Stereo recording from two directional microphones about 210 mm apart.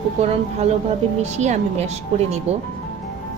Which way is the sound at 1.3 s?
30° right (ahead or behind).